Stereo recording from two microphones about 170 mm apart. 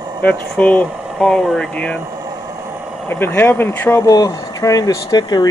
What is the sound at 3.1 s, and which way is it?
Speech, 10° left (ahead or behind).